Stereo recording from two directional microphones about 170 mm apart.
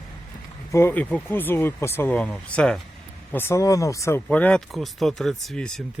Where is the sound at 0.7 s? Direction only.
15° left (ahead or behind).